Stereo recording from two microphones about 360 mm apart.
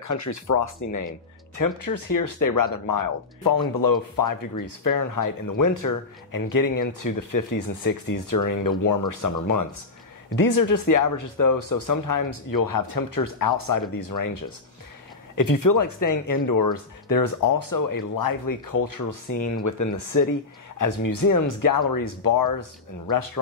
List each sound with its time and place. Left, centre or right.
0.0 s speech: left
10.3 s speech: left
15.6 s speech: left